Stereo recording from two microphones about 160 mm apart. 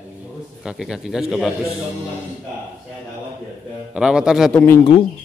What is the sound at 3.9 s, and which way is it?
Speech, 5° right (ahead or behind).